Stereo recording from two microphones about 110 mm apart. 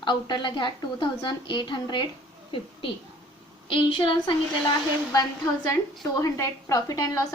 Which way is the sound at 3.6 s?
50° left (ahead or behind).